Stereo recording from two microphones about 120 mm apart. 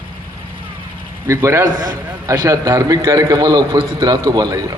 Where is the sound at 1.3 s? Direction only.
25° right (ahead or behind).